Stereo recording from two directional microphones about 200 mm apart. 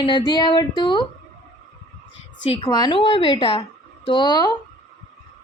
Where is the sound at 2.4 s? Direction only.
30° left (ahead or behind).